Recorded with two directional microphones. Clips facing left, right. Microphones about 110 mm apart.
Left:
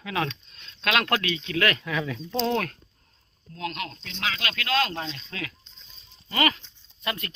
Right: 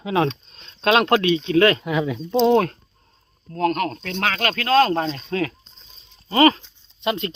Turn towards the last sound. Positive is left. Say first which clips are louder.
# right 9 dB
turn(degrees=-25)  # may be behind; listen again after turning